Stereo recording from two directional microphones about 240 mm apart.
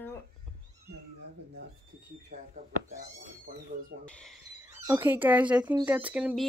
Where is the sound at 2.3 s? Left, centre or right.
Right.